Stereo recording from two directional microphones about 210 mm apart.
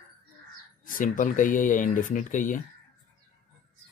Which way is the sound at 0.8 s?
40° left (ahead or behind).